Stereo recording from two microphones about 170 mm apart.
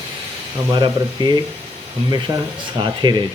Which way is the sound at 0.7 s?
25° right (ahead or behind).